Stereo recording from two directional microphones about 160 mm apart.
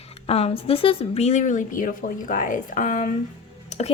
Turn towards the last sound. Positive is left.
turn(degrees=45)  # may be behind; listen again after turning